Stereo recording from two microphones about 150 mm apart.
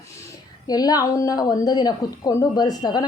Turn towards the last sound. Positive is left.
turn(degrees=25)  # may be behind; listen again after turning